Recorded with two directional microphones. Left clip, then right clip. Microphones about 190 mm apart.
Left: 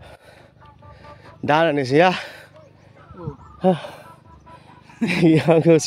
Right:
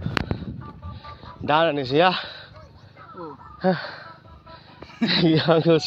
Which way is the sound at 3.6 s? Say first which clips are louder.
Left 3 dB; 55° left (ahead or behind).